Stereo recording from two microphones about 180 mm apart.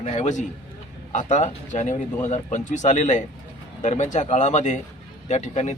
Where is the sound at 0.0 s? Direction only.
40° left (ahead or behind).